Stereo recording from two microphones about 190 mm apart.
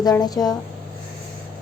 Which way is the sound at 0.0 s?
20° left (ahead or behind).